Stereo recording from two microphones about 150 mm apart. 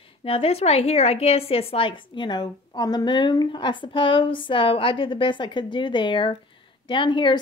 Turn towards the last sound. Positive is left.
turn(degrees=30)  # may be behind; listen again after turning